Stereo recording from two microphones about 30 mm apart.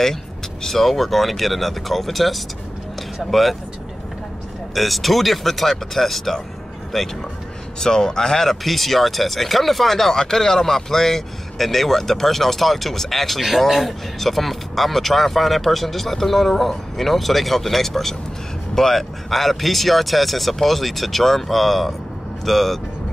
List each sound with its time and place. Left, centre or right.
0.0 s speech: centre
4.7 s speech: centre
7.8 s a man's voice: left
8.4 s speech: centre